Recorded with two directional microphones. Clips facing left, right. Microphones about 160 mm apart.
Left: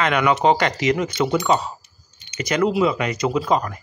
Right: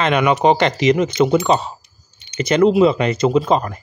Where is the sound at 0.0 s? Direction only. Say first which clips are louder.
Right 3 dB; 20° right (ahead or behind).